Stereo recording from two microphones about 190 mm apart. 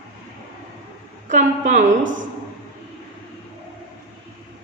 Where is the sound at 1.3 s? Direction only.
40° right (ahead or behind).